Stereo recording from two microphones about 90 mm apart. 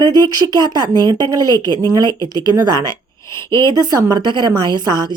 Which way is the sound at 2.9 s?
30° left (ahead or behind).